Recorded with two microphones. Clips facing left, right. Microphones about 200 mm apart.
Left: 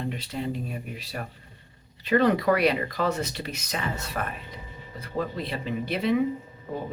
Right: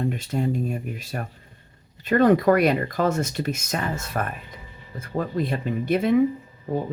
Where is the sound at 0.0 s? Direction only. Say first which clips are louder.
Right 6 dB; 45° right (ahead or behind).